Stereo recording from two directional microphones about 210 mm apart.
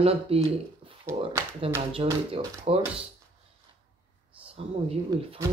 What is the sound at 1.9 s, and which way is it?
Speech, 25° right (ahead or behind).